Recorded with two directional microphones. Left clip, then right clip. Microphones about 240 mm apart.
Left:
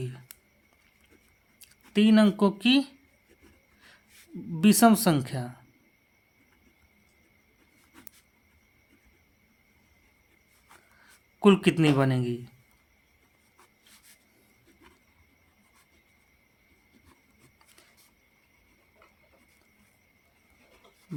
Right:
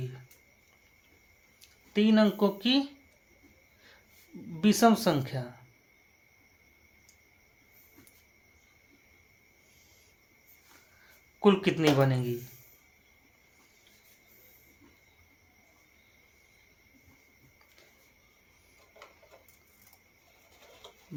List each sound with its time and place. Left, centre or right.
1.9 s speech: left
4.6 s speech: left
11.3 s speech: left